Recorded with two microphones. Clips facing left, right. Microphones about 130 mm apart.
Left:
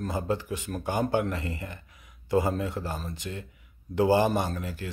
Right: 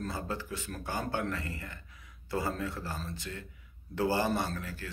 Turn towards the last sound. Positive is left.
turn(degrees=15)  # may be behind; listen again after turning